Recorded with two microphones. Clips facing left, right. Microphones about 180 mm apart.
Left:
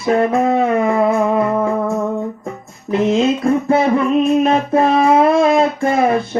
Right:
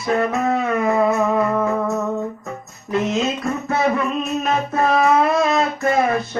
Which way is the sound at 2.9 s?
25° left (ahead or behind).